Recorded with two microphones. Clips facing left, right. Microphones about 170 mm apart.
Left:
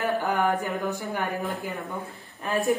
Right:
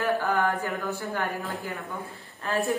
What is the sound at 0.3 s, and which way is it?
Speech, 15° left (ahead or behind).